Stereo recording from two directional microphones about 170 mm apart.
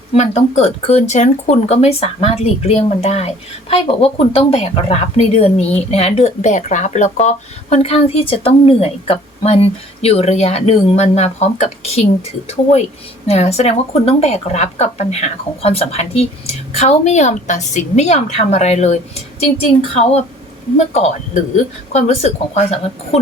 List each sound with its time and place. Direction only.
0.1 s speech: 40° left (ahead or behind)
13.2 s speech: 40° left (ahead or behind)